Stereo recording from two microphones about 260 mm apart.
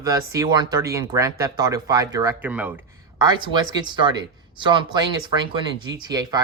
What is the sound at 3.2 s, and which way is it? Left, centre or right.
Speech, centre.